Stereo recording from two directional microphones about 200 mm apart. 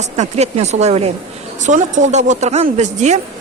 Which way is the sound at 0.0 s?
35° right (ahead or behind).